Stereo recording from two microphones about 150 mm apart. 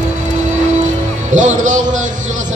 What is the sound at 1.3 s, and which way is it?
Music, 55° right (ahead or behind).